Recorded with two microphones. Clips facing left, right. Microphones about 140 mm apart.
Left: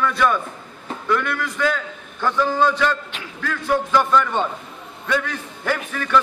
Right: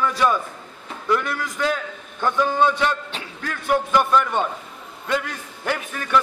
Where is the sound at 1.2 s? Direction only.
40° right (ahead or behind).